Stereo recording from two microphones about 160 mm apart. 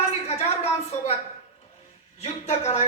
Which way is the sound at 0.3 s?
40° left (ahead or behind).